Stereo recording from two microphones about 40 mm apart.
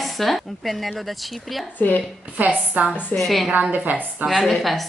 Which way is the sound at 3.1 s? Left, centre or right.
Centre.